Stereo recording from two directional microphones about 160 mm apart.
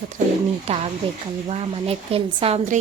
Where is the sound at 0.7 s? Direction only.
40° right (ahead or behind).